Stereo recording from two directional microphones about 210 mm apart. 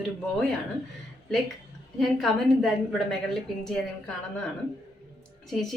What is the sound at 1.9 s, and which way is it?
A woman's voice, centre (ahead or behind).